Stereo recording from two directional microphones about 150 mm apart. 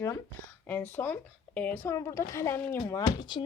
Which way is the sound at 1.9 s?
20° left (ahead or behind).